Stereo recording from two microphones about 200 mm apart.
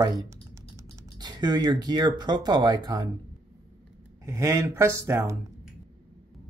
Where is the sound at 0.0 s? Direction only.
20° right (ahead or behind).